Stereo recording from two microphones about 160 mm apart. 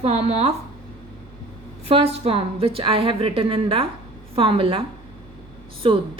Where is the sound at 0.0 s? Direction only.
40° right (ahead or behind).